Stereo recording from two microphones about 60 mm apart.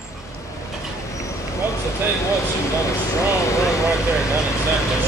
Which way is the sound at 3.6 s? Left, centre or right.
Left.